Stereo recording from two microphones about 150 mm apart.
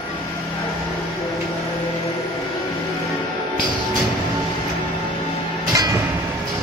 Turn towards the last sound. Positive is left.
turn(degrees=-25)  # may be behind; listen again after turning